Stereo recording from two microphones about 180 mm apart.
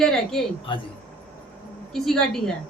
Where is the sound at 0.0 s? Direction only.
Centre (ahead or behind).